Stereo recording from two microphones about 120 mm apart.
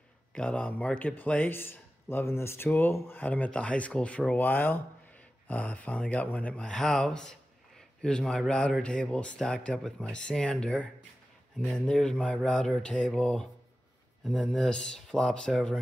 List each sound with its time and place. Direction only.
0.3 s speech: 10° left (ahead or behind)